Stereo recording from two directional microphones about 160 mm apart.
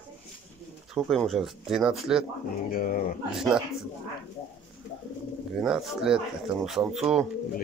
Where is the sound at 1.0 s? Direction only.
Centre (ahead or behind).